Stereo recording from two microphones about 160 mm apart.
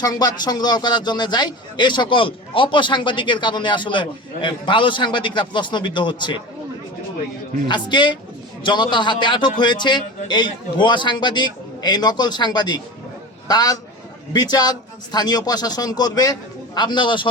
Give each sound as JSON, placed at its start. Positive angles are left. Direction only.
{"t": 0.0, "sound": "a man's voice", "side_deg": 25}
{"t": 7.7, "sound": "a man's voice", "side_deg": 30}